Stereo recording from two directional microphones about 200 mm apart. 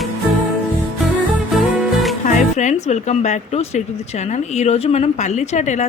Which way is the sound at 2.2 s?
35° left (ahead or behind).